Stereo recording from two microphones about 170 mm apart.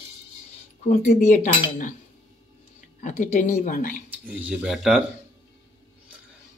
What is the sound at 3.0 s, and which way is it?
Speech, 45° left (ahead or behind).